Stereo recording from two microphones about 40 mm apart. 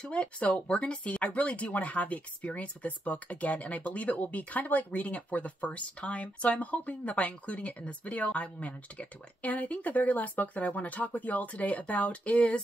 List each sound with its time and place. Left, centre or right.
0.0 s speech: left